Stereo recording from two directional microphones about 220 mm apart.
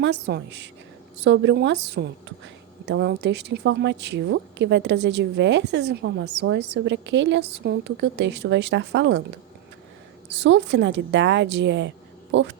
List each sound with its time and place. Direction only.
0.0 s a woman's voice: 50° right (ahead or behind)
10.3 s a woman's voice: 55° right (ahead or behind)